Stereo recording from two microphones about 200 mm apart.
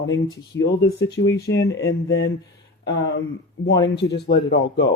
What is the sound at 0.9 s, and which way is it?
Speech, 55° left (ahead or behind).